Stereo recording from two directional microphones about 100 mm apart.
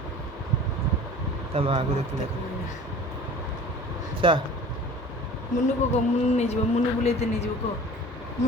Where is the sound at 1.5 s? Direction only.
70° right (ahead or behind).